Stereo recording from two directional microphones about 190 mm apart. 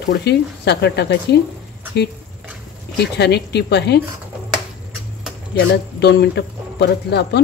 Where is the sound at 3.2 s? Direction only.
60° left (ahead or behind).